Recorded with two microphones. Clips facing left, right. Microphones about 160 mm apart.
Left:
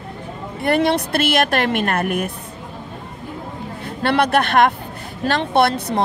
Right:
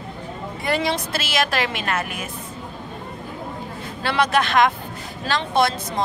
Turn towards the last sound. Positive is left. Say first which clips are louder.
# left 4 dB
turn(degrees=60)  # may be behind; listen again after turning